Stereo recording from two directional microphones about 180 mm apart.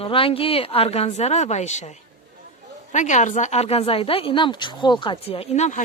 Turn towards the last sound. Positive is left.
turn(degrees=40)  # may be behind; listen again after turning